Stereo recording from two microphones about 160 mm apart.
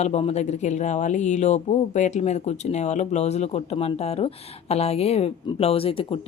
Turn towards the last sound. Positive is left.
turn(degrees=35)  # may be behind; listen again after turning